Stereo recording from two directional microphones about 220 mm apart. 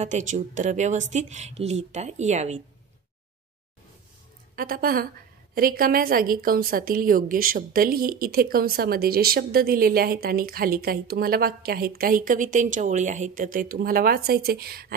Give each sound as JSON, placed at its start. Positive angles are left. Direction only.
{"t": 0.0, "sound": "a woman's voice", "side_deg": -35}
{"t": 4.6, "sound": "a woman's voice", "side_deg": -40}